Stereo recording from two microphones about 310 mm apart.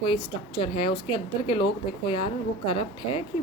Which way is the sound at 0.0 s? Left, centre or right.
Centre.